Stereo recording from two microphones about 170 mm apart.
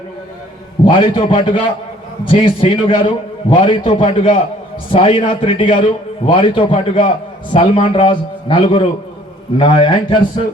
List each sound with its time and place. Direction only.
0.9 s a man's voice: 30° left (ahead or behind)